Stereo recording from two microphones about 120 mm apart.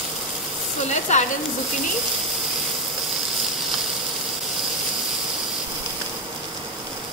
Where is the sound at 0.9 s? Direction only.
75° left (ahead or behind).